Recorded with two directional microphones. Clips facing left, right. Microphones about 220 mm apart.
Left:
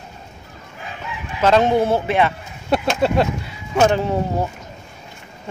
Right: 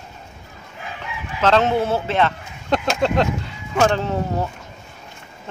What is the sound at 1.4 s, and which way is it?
Speech, 10° left (ahead or behind).